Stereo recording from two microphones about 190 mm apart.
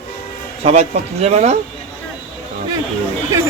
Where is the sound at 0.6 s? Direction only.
35° right (ahead or behind).